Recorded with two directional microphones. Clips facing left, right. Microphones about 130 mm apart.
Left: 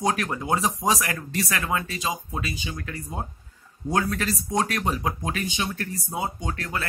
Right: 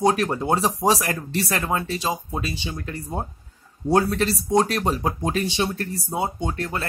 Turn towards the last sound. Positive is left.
turn(degrees=-30)  # may be behind; listen again after turning